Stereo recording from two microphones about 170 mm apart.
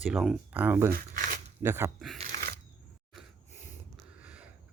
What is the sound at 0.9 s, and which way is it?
Speech, 50° right (ahead or behind).